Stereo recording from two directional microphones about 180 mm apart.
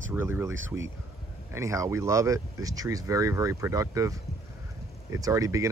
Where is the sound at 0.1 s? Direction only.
10° right (ahead or behind).